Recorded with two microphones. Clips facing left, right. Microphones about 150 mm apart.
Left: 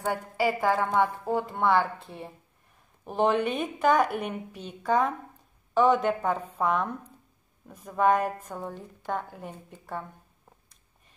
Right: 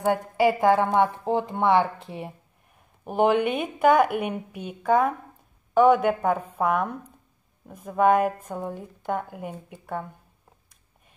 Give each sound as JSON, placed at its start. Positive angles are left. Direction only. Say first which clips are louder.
{"t": 0.4, "sound": "speech", "louder": "right 5 dB", "side_deg": -15}